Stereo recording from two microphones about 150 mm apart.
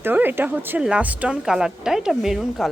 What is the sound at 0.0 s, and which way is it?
Speech, 15° right (ahead or behind).